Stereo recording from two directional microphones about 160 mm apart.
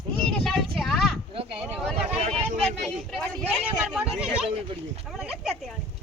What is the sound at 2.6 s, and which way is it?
Speech, 5° left (ahead or behind).